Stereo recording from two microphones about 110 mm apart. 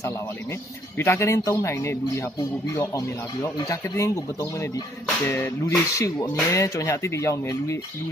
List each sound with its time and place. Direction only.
0.9 s speech: 25° left (ahead or behind)